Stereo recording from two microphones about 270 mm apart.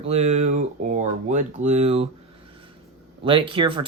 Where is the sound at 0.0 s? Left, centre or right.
Right.